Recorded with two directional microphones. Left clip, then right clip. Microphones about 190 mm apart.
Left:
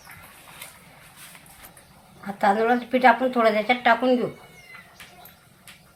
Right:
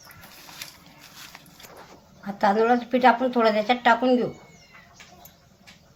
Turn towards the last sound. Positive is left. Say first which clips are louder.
# even
turn(degrees=-15)  # may be behind; listen again after turning